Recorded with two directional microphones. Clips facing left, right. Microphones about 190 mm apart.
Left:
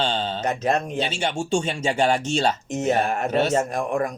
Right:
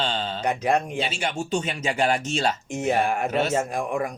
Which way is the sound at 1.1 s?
30° left (ahead or behind).